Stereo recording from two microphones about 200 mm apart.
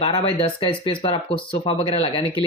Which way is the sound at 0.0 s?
25° left (ahead or behind).